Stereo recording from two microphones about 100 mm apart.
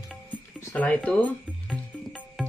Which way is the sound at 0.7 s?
10° left (ahead or behind).